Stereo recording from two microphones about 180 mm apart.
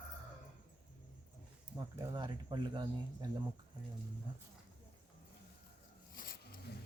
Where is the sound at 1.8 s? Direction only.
25° right (ahead or behind).